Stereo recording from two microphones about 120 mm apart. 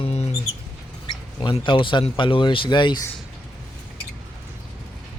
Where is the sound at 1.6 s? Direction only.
45° left (ahead or behind).